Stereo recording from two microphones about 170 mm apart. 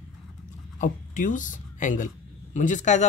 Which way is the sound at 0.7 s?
50° left (ahead or behind).